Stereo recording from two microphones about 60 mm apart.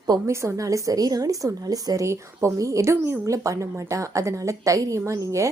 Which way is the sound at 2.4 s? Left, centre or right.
Right.